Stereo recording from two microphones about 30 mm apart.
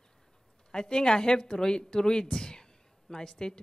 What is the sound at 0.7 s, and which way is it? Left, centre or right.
Speech, left.